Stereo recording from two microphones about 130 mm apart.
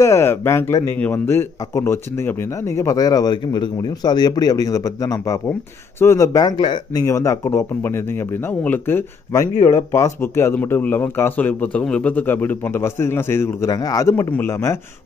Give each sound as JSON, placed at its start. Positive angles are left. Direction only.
{"t": 0.0, "sound": "speech", "side_deg": 20}